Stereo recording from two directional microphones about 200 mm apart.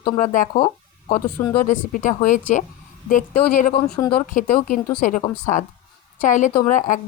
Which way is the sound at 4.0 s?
20° left (ahead or behind).